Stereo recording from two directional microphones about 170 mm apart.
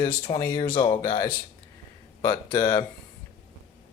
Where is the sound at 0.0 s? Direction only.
30° left (ahead or behind).